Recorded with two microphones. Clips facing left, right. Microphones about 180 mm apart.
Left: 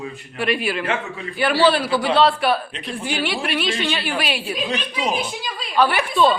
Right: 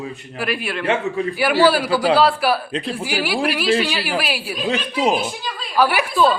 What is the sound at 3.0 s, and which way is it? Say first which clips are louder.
A woman's voice: right 1 dB; 5° right (ahead or behind).